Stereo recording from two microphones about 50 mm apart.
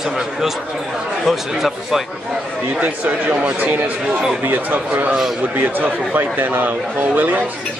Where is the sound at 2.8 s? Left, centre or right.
Right.